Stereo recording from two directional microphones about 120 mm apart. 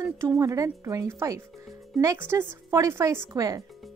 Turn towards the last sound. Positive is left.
turn(degrees=-30)  # may be behind; listen again after turning